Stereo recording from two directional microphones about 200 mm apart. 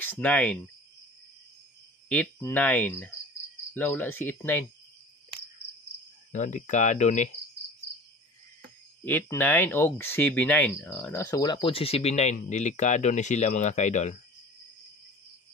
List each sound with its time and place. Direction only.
0.0 s speech: 5° left (ahead or behind)
2.0 s speech: 5° left (ahead or behind)
6.3 s speech: 40° left (ahead or behind)
9.0 s speech: 10° left (ahead or behind)
11.6 s speech: 30° left (ahead or behind)